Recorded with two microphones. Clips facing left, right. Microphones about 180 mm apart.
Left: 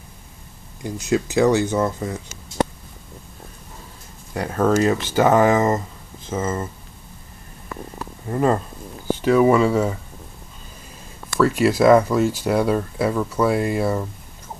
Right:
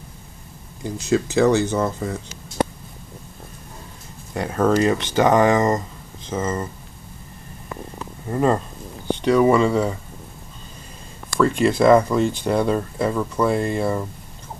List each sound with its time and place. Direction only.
0.8 s speech: 10° left (ahead or behind)
4.3 s speech: centre (ahead or behind)
8.3 s speech: centre (ahead or behind)
11.3 s speech: 5° left (ahead or behind)